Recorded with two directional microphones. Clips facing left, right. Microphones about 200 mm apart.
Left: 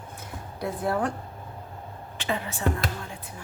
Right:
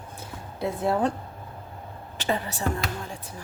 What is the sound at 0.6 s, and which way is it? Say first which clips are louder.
Speech: right 3 dB; 25° right (ahead or behind).